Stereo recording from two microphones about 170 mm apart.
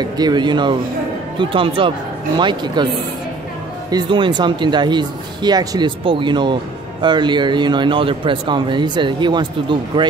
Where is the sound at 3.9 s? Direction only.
25° right (ahead or behind).